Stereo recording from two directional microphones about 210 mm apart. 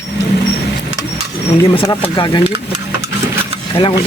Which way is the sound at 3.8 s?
25° left (ahead or behind).